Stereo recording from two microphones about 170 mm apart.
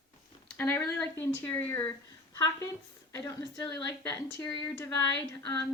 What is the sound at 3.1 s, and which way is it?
A woman's voice, 15° left (ahead or behind).